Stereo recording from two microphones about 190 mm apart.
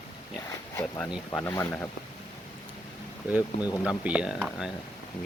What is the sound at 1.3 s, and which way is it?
Speech, 15° left (ahead or behind).